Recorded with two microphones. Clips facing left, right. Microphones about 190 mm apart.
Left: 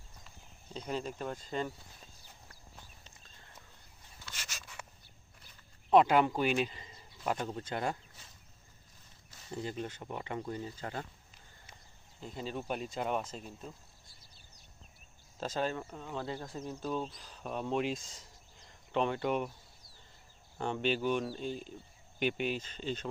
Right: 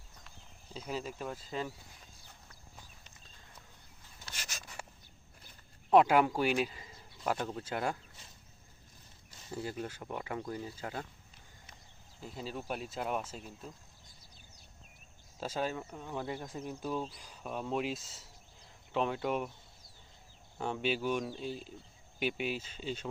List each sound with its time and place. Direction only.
0.3 s speech: 5° right (ahead or behind)
4.5 s rub: 40° right (ahead or behind)
5.9 s speech: 10° right (ahead or behind)
9.5 s speech: 5° right (ahead or behind)
12.2 s speech: 5° right (ahead or behind)
15.4 s speech: 10° right (ahead or behind)
16.0 s speech: 15° right (ahead or behind); by 19.5 s centre (ahead or behind)
20.6 s speech: 5° right (ahead or behind)